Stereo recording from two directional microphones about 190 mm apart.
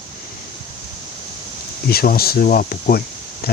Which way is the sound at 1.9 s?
55° left (ahead or behind).